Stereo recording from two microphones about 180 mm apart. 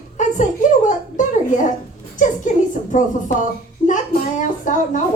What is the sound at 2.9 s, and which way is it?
Speech, 45° left (ahead or behind).